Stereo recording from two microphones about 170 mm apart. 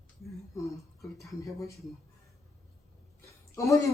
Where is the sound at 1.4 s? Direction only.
20° left (ahead or behind).